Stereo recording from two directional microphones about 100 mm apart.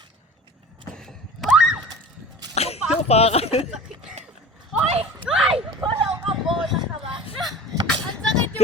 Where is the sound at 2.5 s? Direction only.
90° left.